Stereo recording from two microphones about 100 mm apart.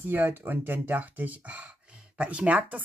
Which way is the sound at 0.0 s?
20° right (ahead or behind).